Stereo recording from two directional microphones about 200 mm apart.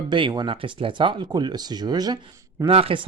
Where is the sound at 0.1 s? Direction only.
20° right (ahead or behind).